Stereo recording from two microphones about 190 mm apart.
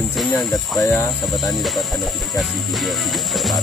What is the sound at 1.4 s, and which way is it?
Speech, centre (ahead or behind).